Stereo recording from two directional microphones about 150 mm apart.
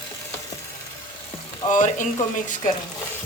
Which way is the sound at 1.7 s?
60° left (ahead or behind).